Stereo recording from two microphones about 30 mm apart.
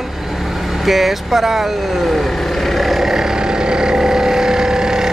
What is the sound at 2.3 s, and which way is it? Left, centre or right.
Vehicle, centre.